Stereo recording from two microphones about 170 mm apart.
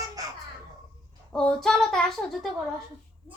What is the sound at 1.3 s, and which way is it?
Speech, 5° left (ahead or behind).